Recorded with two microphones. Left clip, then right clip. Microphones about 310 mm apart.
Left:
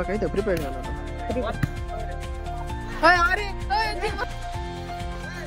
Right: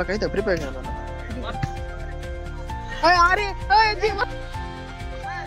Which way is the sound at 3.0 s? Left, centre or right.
Centre.